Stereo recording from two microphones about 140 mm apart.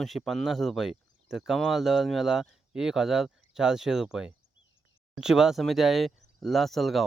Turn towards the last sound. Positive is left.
turn(degrees=0)  # may be behind; listen again after turning